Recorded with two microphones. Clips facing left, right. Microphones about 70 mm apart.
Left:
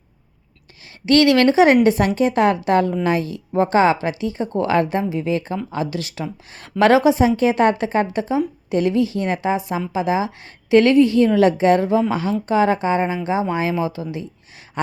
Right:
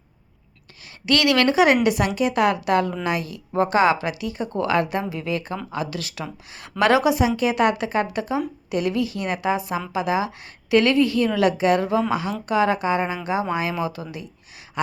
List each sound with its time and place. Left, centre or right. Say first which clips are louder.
1.0 s a woman's voice: left 5 dB; left